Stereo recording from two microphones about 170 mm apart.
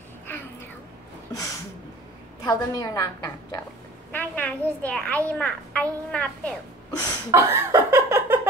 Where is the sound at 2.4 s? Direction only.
20° left (ahead or behind).